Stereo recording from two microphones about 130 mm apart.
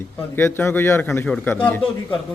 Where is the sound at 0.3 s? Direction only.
15° left (ahead or behind).